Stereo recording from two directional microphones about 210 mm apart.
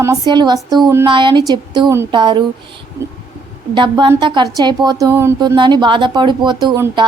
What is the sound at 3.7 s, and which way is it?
A woman's voice, 20° right (ahead or behind).